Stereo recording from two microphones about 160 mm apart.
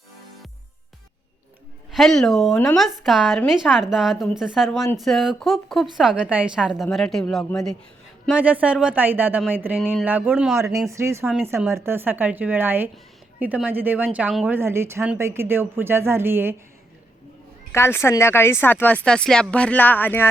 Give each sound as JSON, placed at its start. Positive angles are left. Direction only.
{"t": 1.9, "sound": "a woman's voice", "side_deg": 0}
{"t": 8.3, "sound": "a woman's voice", "side_deg": -10}
{"t": 10.6, "sound": "a woman's voice", "side_deg": -20}
{"t": 17.7, "sound": "speech", "side_deg": 15}